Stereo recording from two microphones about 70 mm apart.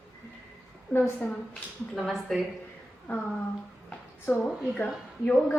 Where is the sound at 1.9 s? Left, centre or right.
Centre.